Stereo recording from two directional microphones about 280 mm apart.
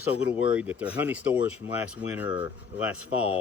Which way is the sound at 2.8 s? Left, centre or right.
Left.